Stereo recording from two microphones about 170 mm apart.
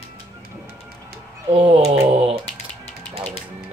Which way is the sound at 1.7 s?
35° right (ahead or behind).